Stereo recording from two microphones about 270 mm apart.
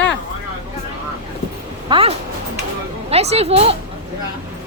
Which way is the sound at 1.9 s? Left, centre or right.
Right.